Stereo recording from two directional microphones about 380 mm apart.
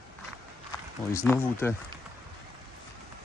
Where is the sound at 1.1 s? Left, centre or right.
Centre.